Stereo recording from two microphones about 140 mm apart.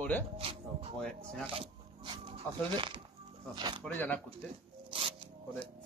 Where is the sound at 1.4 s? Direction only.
40° right (ahead or behind).